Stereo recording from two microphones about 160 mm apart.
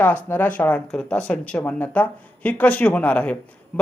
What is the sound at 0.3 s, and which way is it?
Speech, 10° left (ahead or behind).